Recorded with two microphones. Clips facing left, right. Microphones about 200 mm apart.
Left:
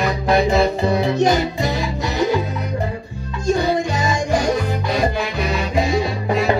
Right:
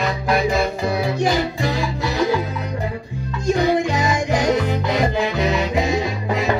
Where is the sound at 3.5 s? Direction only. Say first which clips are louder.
Right 1 dB; 15° right (ahead or behind).